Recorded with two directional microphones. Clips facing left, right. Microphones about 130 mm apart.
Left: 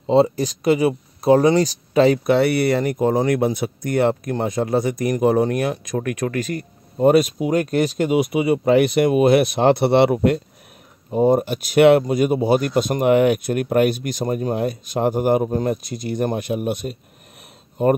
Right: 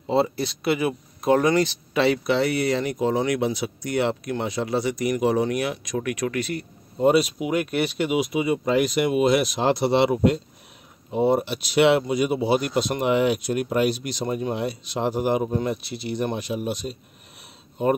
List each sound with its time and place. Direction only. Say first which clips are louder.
0.0 s speech: left 6 dB; 35° left (ahead or behind)
8.3 s speech: left 5 dB; 65° left (ahead or behind)
11.1 s speech: left 4 dB; 45° left (ahead or behind)